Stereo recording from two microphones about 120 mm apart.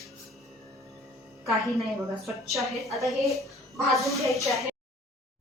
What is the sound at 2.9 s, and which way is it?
Speech, centre (ahead or behind).